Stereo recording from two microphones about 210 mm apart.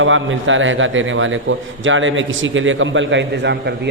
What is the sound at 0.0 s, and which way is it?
A man's voice, 65° right (ahead or behind).